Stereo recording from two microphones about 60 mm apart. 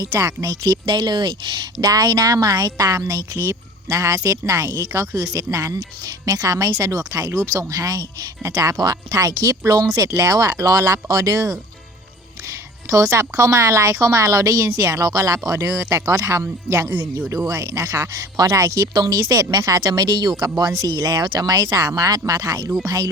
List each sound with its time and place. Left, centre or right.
0.2 s a woman's voice: right
1.8 s a woman's voice: right
4.7 s a woman's voice: right
7.3 s a woman's voice: right
7.7 s speech: right
9.1 s a woman's voice: right
10.1 s a woman's voice: right
15.2 s a woman's voice: right
18.1 s a woman's voice: right
19.2 s speech: right